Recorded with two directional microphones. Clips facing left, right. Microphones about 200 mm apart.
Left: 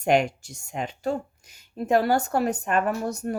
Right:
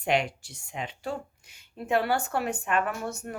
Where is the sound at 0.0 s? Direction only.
45° left (ahead or behind).